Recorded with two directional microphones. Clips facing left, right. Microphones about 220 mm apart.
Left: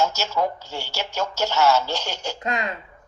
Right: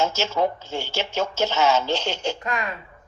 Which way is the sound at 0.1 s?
50° right (ahead or behind).